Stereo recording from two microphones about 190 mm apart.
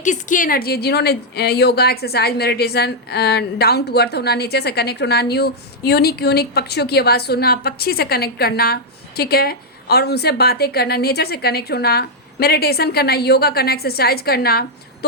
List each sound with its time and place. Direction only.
0.0 s a woman's voice: 40° left (ahead or behind)